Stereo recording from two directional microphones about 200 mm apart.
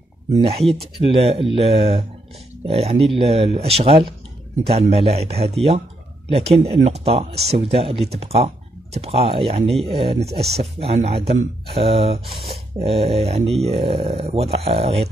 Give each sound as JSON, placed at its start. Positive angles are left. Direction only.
{"t": 0.3, "sound": "speech", "side_deg": -30}